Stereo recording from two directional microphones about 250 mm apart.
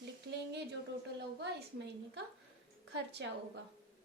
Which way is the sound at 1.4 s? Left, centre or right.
Right.